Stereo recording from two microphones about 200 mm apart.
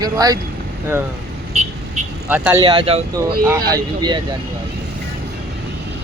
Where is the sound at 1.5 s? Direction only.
35° right (ahead or behind).